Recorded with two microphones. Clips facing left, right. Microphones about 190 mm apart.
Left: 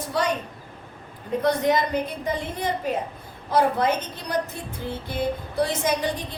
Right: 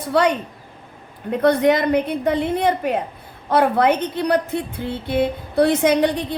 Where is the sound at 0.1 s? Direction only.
65° right (ahead or behind).